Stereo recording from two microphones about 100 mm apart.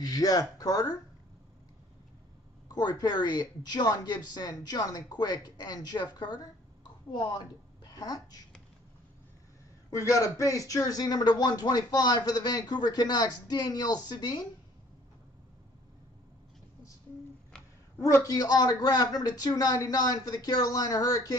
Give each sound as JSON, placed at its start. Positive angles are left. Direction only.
{"t": 0.0, "sound": "a man's voice", "side_deg": 40}
{"t": 2.7, "sound": "a woman's voice", "side_deg": 40}
{"t": 9.8, "sound": "speech", "side_deg": 35}
{"t": 18.0, "sound": "a man's voice", "side_deg": 35}